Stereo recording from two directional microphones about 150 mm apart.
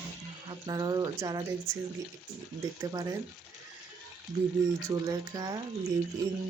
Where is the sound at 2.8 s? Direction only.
25° right (ahead or behind).